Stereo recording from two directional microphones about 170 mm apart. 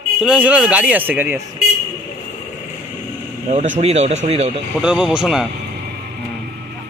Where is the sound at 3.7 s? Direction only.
40° right (ahead or behind).